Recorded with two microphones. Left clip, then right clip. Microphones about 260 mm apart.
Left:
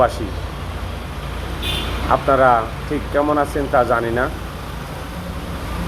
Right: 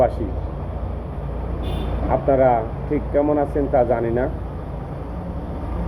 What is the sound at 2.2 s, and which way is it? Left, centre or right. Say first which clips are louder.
Speech: left 2 dB; centre.